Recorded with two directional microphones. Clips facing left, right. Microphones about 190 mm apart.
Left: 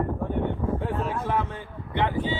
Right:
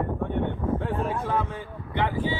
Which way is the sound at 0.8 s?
15° left (ahead or behind).